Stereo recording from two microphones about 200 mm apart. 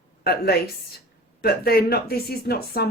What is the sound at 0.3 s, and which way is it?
A woman's voice, 50° left (ahead or behind).